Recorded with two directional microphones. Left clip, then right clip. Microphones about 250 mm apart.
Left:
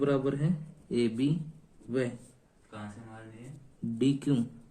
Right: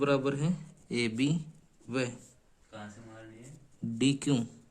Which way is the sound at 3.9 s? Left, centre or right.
Right.